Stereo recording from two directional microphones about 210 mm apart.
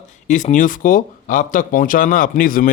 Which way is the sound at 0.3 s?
35° left (ahead or behind).